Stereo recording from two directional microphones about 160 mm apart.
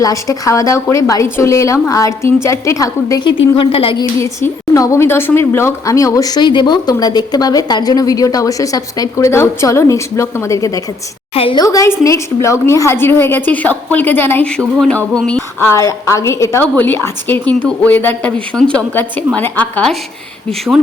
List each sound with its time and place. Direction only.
0.0 s a woman's voice: 20° left (ahead or behind)
3.5 s a woman's voice: 35° left (ahead or behind)
4.2 s a woman's voice: 15° left (ahead or behind)
11.3 s a woman's voice: 35° left (ahead or behind)
11.6 s a woman's voice: 20° left (ahead or behind); by 15.4 s 5° left (ahead or behind)
15.6 s a woman's voice: 20° left (ahead or behind)